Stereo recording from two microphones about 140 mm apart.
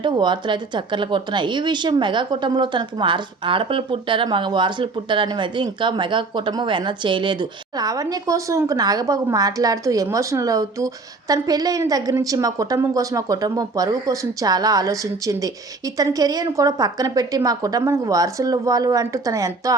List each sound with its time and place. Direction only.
0.0 s a woman's voice: 35° right (ahead or behind)